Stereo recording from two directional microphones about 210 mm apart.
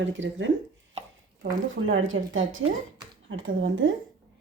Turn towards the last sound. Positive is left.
turn(degrees=-65)  # may be behind; listen again after turning